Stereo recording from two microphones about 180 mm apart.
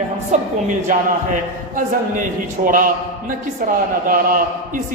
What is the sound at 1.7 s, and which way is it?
A man's voice, 50° right (ahead or behind).